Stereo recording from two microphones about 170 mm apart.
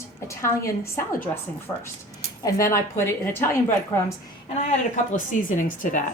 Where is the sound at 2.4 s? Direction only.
20° left (ahead or behind).